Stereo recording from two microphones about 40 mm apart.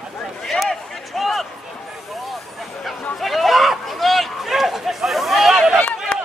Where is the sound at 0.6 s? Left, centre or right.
Centre.